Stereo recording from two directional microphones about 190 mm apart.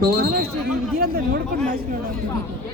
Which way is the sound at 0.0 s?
50° right (ahead or behind).